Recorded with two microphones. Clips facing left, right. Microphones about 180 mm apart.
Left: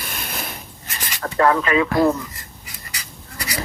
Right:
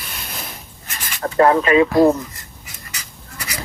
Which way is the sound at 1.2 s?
30° right (ahead or behind).